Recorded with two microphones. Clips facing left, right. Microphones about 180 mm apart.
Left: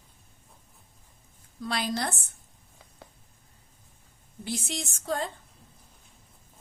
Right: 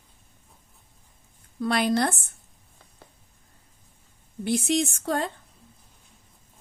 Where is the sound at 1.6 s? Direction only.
60° right (ahead or behind).